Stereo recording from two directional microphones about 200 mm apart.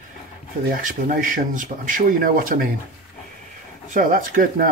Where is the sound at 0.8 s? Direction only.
45° right (ahead or behind).